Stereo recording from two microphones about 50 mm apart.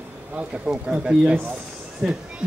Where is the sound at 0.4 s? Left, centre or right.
Right.